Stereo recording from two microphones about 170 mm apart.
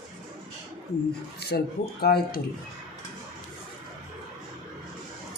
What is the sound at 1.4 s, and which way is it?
Speech, 70° left (ahead or behind).